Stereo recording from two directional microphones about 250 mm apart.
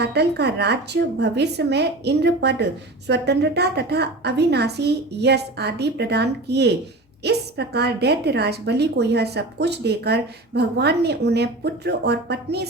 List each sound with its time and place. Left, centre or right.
0.0 s a woman's voice: right